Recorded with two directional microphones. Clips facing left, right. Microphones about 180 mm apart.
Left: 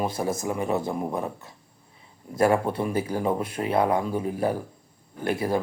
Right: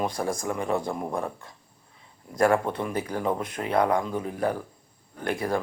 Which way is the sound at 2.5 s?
10° left (ahead or behind).